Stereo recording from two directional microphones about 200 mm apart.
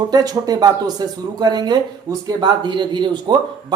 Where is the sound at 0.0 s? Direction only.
20° right (ahead or behind).